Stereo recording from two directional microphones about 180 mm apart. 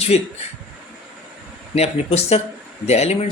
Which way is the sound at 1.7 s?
35° left (ahead or behind).